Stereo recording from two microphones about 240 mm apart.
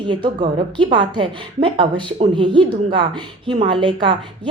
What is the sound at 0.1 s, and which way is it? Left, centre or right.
A woman's voice, centre.